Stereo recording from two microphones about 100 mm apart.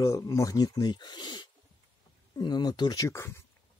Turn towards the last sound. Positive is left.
turn(degrees=30)  # may be behind; listen again after turning